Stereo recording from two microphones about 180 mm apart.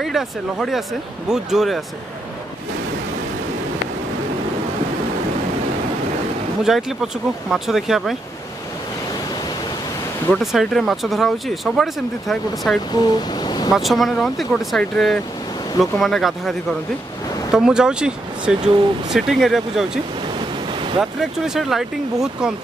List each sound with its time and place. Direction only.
0.0 s speech: centre (ahead or behind)
6.6 s speech: centre (ahead or behind)
10.2 s speech: centre (ahead or behind)
12.9 s speech: 25° left (ahead or behind)
13.7 s speech: centre (ahead or behind)
21.0 s speech: centre (ahead or behind)